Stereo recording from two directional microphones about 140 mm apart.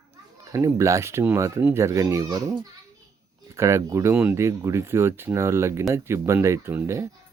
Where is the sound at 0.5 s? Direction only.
20° right (ahead or behind).